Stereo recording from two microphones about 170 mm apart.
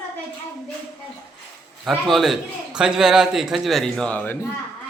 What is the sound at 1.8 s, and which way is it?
A man's voice, centre (ahead or behind).